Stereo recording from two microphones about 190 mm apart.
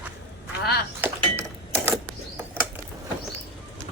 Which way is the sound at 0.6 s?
55° left (ahead or behind).